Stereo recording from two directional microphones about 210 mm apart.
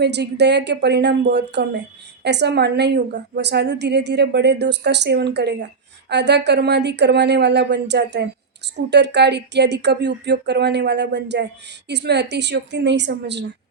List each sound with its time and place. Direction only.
0.0 s a woman's voice: 55° right (ahead or behind)